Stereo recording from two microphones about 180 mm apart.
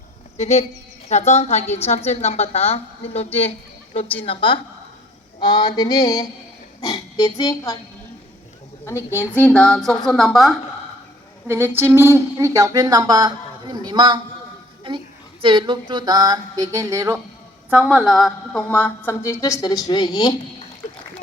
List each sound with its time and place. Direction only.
0.3 s a woman's voice: 40° left (ahead or behind)
3.9 s mantra: 30° left (ahead or behind)
6.8 s speech: 20° left (ahead or behind)
8.9 s a woman's voice: 15° left (ahead or behind)
11.4 s speech: 15° right (ahead or behind)
17.7 s a woman's voice: 5° right (ahead or behind); by 20.3 s 20° left (ahead or behind)